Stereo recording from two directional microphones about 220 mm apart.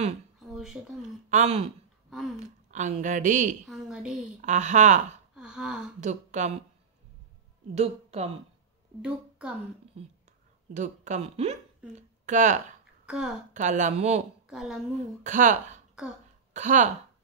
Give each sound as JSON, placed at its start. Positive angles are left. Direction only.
{"t": 0.5, "sound": "speech", "side_deg": 0}
{"t": 1.3, "sound": "a woman's voice", "side_deg": -30}
{"t": 2.0, "sound": "a sound", "side_deg": 0}
{"t": 2.7, "sound": "speech", "side_deg": -35}
{"t": 3.6, "sound": "a woman's voice", "side_deg": 0}
{"t": 4.4, "sound": "speech", "side_deg": -35}
{"t": 5.3, "sound": "a sound", "side_deg": -5}
{"t": 5.9, "sound": "speech", "side_deg": -35}
{"t": 7.7, "sound": "a woman's voice", "side_deg": -30}
{"t": 10.7, "sound": "speech", "side_deg": -35}
{"t": 13.0, "sound": "a woman's voice", "side_deg": -5}
{"t": 13.5, "sound": "speech", "side_deg": -35}
{"t": 14.5, "sound": "a woman's voice", "side_deg": 0}
{"t": 15.2, "sound": "speech", "side_deg": -35}